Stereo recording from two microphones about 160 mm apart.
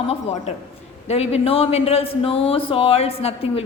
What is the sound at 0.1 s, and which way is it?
A woman's voice, 40° left (ahead or behind).